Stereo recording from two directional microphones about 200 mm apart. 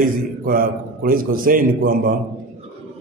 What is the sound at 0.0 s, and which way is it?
A man's voice, 45° right (ahead or behind).